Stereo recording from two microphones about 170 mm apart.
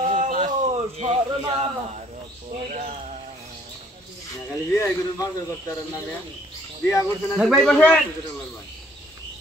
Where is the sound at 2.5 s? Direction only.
40° right (ahead or behind).